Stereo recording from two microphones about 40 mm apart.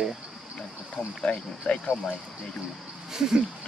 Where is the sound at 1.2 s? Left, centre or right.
Left.